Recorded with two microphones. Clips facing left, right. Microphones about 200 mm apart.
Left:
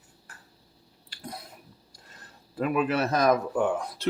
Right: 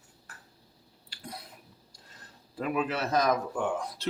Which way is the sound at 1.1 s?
45° left (ahead or behind).